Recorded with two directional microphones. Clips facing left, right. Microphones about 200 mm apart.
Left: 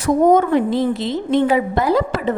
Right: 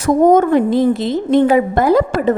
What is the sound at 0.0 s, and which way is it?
A woman's voice, 45° right (ahead or behind).